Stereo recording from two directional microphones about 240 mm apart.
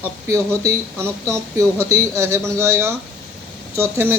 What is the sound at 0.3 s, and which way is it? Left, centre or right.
Speech, centre.